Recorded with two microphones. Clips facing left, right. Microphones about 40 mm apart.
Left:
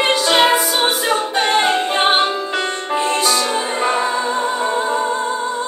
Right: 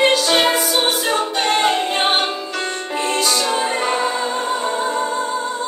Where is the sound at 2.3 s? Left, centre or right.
Left.